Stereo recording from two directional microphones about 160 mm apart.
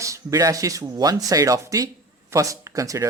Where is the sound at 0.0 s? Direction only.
20° right (ahead or behind).